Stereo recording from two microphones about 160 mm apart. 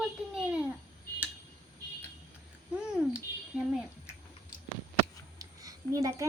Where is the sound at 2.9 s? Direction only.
5° right (ahead or behind).